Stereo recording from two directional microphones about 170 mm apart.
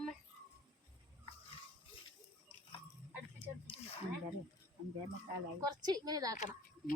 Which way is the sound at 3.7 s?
30° left (ahead or behind).